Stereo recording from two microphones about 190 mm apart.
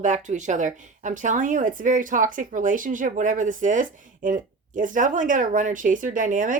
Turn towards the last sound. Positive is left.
turn(degrees=-45)  # may be behind; listen again after turning